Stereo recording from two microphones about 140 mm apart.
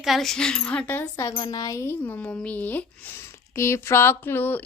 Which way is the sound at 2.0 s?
10° left (ahead or behind).